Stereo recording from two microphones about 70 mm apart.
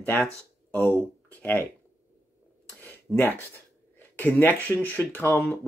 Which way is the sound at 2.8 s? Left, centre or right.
Left.